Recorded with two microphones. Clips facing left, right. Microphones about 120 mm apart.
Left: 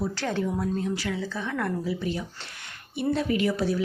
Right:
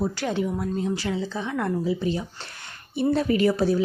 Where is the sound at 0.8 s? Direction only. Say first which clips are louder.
Right 3 dB; 25° right (ahead or behind).